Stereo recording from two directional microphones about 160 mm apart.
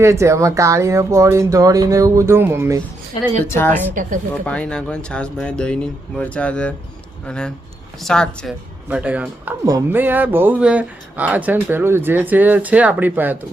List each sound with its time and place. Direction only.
0.0 s speech: 15° right (ahead or behind)
3.4 s speech: 15° left (ahead or behind)
8.9 s speech: 10° right (ahead or behind)